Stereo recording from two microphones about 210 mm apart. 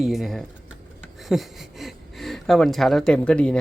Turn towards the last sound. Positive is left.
turn(degrees=5)  # may be behind; listen again after turning